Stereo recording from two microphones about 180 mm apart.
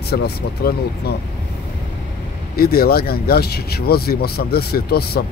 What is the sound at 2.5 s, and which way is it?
Speech, 60° left (ahead or behind).